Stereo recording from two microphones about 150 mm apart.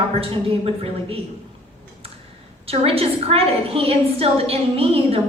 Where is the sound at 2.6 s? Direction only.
40° right (ahead or behind).